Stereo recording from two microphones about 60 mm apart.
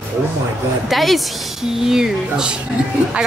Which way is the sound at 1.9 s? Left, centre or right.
Centre.